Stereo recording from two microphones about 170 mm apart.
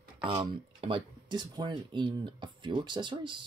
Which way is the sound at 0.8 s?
30° right (ahead or behind).